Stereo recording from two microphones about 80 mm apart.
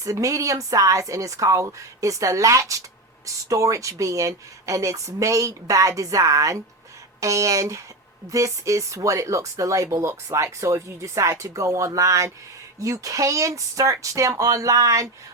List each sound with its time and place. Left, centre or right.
0.0 s speech: right